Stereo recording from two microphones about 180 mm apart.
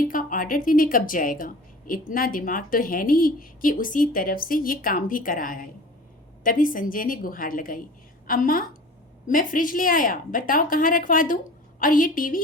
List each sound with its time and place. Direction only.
0.0 s speech: 50° left (ahead or behind)